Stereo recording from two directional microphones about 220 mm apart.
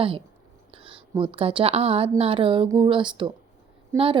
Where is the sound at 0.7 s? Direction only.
25° right (ahead or behind).